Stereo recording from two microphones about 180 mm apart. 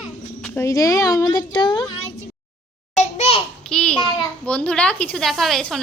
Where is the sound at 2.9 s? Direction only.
40° left (ahead or behind).